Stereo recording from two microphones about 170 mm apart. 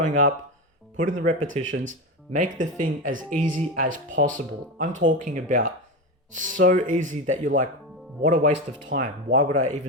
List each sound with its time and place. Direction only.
0.0 s speech: 50° right (ahead or behind)